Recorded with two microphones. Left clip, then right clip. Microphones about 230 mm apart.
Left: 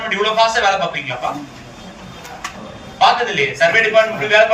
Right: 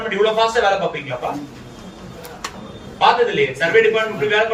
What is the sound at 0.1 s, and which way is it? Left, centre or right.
Speech, centre.